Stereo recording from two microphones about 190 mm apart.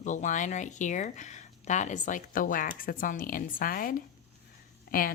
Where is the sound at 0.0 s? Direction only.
40° left (ahead or behind).